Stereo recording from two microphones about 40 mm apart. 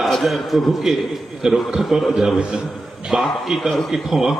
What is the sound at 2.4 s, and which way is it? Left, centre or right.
Speech, right.